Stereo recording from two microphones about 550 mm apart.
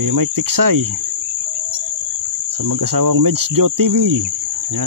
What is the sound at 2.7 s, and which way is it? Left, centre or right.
Speech, right.